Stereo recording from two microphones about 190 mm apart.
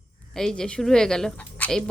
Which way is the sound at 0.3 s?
5° left (ahead or behind).